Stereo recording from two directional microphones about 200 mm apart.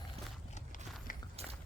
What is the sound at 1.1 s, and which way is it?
Biting, 40° left (ahead or behind).